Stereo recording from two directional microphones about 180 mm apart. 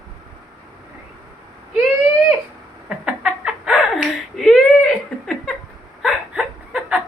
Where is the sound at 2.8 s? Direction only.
5° right (ahead or behind).